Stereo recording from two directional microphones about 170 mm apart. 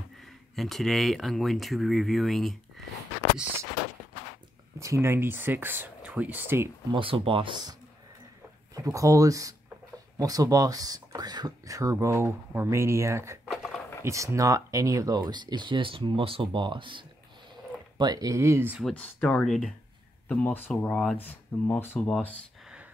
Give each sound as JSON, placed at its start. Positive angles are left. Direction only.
{"t": 0.2, "sound": "speech", "side_deg": 0}
{"t": 4.7, "sound": "speech", "side_deg": -15}
{"t": 6.9, "sound": "speech", "side_deg": -30}
{"t": 8.7, "sound": "speech", "side_deg": -20}
{"t": 13.5, "sound": "a sound", "side_deg": 0}
{"t": 14.0, "sound": "speech", "side_deg": -20}
{"t": 18.8, "sound": "speech", "side_deg": 5}